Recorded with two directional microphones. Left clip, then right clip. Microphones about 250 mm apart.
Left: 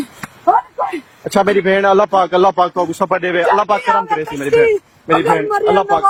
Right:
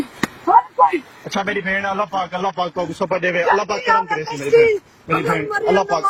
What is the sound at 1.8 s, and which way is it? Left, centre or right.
Speech, left.